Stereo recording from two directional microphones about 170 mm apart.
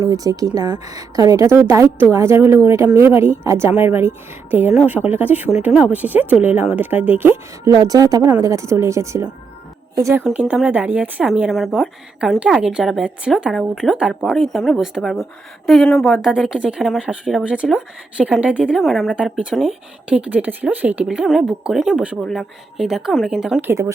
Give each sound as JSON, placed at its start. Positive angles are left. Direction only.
{"t": 0.0, "sound": "a woman's voice", "side_deg": -20}
{"t": 10.2, "sound": "speech", "side_deg": -5}